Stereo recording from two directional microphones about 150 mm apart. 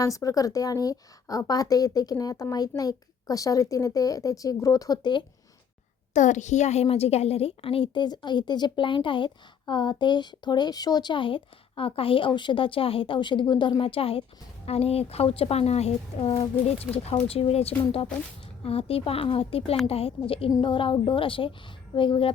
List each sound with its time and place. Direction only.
0.0 s a woman's voice: 25° left (ahead or behind)
6.1 s a woman's voice: 55° left (ahead or behind); by 22.3 s 35° left (ahead or behind)